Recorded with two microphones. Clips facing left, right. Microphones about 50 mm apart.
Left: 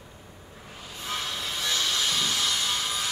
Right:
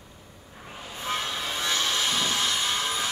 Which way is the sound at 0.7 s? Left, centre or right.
Right.